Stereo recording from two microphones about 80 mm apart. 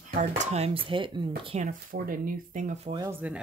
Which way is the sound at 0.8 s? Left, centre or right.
Right.